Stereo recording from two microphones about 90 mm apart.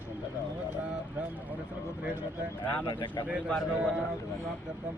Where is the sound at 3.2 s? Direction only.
15° right (ahead or behind).